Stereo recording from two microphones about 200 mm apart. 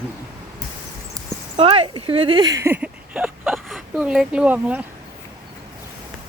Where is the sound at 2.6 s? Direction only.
10° right (ahead or behind).